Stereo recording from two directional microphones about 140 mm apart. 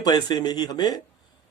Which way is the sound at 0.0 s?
30° left (ahead or behind).